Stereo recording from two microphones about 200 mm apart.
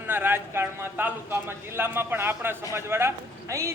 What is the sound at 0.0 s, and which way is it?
A man's voice, 10° right (ahead or behind).